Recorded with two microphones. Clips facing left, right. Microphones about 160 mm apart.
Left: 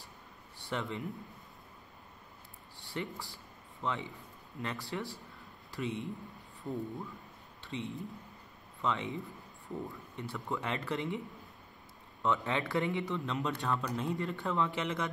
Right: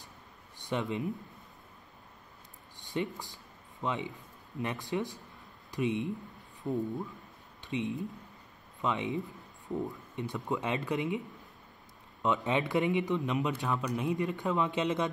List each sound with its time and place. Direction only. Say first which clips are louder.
0.6 s speech: right 4 dB; 15° right (ahead or behind)
2.8 s speech: right 5 dB; 20° right (ahead or behind)
7.6 s speech: right 6 dB; 20° right (ahead or behind)
12.2 s speech: right 3 dB; 15° right (ahead or behind)